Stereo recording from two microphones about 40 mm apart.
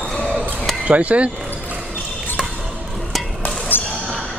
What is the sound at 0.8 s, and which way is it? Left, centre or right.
Speech, right.